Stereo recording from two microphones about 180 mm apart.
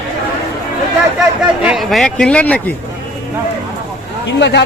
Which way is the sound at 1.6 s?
Centre (ahead or behind).